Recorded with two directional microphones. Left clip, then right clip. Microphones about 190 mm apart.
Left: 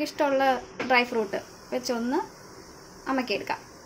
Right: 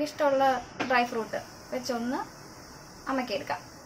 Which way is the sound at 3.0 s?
40° left (ahead or behind).